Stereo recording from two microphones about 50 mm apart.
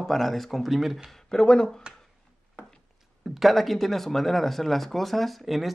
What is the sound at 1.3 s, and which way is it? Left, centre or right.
Speech, centre.